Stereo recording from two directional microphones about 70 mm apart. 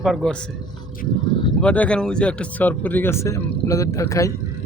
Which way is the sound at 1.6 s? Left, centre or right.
Centre.